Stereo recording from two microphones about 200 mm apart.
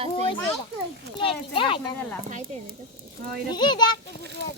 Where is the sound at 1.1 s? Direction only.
25° left (ahead or behind).